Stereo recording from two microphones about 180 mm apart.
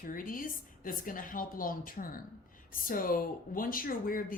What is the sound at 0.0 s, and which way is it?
A woman's voice, 50° left (ahead or behind).